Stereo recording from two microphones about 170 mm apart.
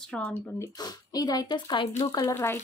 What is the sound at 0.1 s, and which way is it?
Speech, 5° left (ahead or behind).